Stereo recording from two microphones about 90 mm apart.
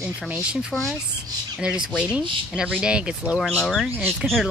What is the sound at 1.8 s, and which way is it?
Speech, 10° right (ahead or behind).